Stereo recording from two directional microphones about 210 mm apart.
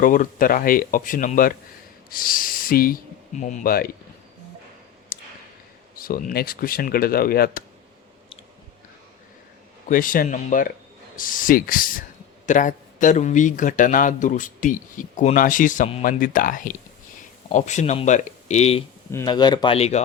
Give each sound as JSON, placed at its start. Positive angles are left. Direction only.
{"t": 0.0, "sound": "a man's voice", "side_deg": 40}
{"t": 5.1, "sound": "a sound", "side_deg": 40}
{"t": 6.0, "sound": "speech", "side_deg": 40}
{"t": 9.9, "sound": "a man's voice", "side_deg": 40}
{"t": 19.1, "sound": "speech", "side_deg": 20}